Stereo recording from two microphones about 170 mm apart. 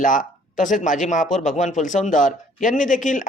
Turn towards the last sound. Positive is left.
turn(degrees=50)  # may be behind; listen again after turning